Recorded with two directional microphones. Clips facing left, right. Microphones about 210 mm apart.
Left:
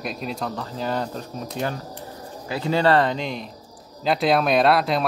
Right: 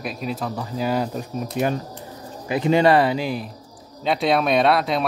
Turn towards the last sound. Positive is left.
turn(degrees=0)  # may be behind; listen again after turning